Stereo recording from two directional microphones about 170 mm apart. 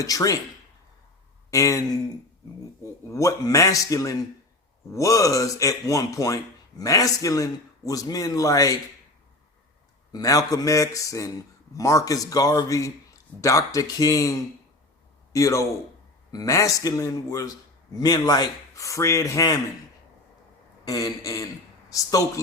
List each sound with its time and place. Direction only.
0.0 s speech: 20° left (ahead or behind)
1.5 s speech: 20° left (ahead or behind)
3.1 s speech: 20° left (ahead or behind)
10.1 s a man's voice: 20° left (ahead or behind)
20.8 s speech: 20° left (ahead or behind)